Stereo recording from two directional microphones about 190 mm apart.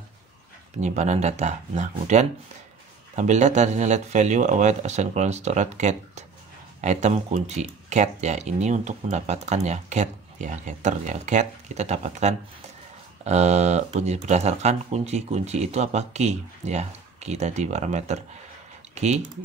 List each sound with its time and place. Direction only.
0.7 s speech: 35° right (ahead or behind)